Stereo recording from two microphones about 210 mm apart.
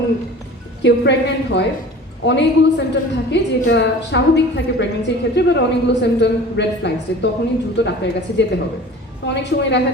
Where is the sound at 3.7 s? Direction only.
55° left (ahead or behind).